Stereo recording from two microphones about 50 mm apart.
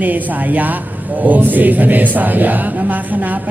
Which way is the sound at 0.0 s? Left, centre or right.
Right.